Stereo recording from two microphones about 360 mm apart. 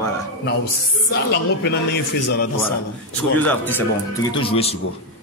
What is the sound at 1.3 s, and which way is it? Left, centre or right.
Speech, left.